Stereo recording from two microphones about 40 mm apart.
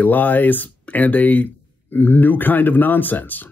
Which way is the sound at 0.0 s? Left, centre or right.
Left.